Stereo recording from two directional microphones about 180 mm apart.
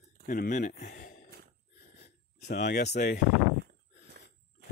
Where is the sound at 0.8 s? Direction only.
50° left (ahead or behind).